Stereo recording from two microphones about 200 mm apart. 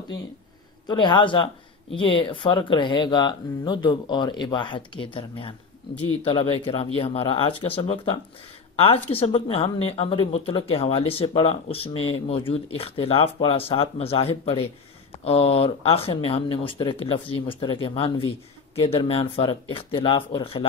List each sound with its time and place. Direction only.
0.8 s speech: 25° left (ahead or behind)